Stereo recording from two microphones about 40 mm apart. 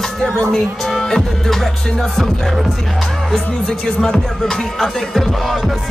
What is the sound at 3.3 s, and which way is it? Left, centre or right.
Music, centre.